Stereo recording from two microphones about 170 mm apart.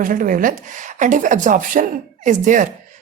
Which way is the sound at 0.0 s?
55° right (ahead or behind).